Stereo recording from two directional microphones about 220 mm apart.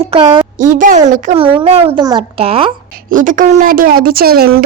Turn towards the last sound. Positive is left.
turn(degrees=-45)  # may be behind; listen again after turning